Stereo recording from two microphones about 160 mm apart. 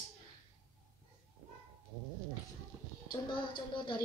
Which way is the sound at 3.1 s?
30° left (ahead or behind).